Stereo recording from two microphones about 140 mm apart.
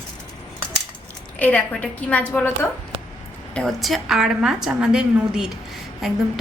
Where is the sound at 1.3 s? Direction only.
10° left (ahead or behind).